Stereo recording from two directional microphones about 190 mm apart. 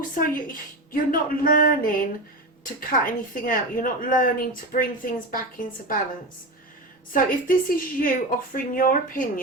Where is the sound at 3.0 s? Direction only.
45° left (ahead or behind).